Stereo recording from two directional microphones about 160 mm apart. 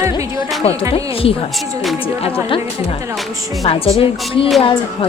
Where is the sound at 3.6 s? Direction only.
35° left (ahead or behind).